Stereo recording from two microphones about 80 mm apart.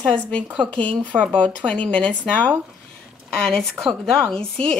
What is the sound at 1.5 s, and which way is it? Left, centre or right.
Speech, centre.